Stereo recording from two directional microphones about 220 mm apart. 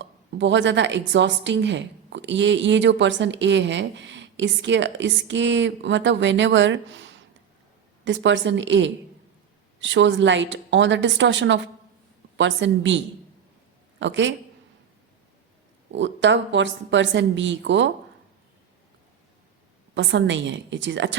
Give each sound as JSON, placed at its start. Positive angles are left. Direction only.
{"t": 0.0, "sound": "a woman's voice", "side_deg": -55}
{"t": 14.0, "sound": "a woman's voice", "side_deg": -55}
{"t": 16.0, "sound": "a woman's voice", "side_deg": -55}
{"t": 19.9, "sound": "a woman's voice", "side_deg": -55}